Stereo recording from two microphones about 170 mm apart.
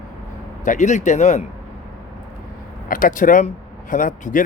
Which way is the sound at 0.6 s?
45° left (ahead or behind).